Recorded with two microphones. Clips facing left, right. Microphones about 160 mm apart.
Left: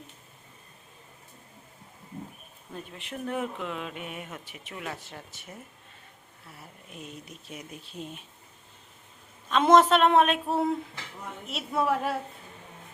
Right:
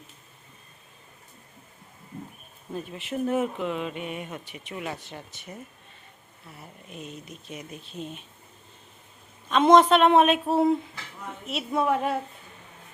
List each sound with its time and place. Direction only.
2.7 s speech: 5° right (ahead or behind)
6.6 s speech: 5° left (ahead or behind)
9.5 s speech: 5° left (ahead or behind)